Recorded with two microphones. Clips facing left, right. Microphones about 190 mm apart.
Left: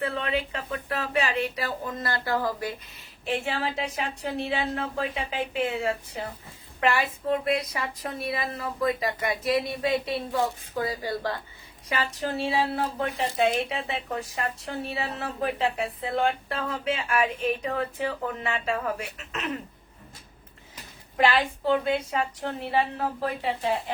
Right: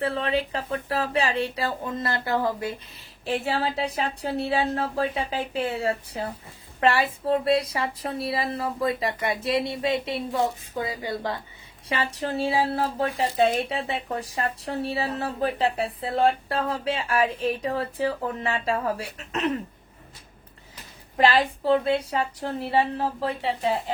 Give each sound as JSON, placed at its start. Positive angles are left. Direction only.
{"t": 0.0, "sound": "a woman's voice", "side_deg": -35}
{"t": 11.9, "sound": "speech", "side_deg": -30}
{"t": 21.2, "sound": "speech", "side_deg": -35}